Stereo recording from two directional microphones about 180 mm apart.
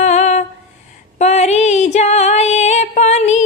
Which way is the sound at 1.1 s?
40° left (ahead or behind).